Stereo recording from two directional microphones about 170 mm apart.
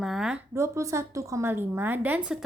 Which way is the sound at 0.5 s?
15° right (ahead or behind).